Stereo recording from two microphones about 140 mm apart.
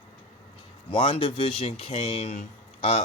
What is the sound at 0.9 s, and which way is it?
Speech, 40° left (ahead or behind).